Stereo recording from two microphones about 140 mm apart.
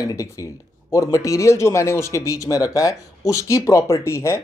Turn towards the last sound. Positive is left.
turn(degrees=20)  # may be behind; listen again after turning